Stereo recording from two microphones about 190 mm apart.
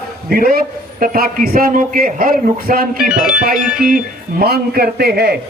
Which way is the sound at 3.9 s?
50° right (ahead or behind).